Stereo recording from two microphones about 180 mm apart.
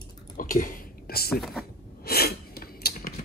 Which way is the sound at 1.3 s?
Centre (ahead or behind).